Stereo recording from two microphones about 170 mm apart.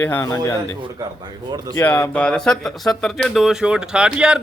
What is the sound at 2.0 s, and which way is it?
Speech, 5° left (ahead or behind).